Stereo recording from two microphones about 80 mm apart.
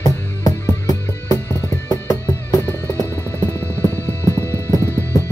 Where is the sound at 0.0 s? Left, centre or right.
Left.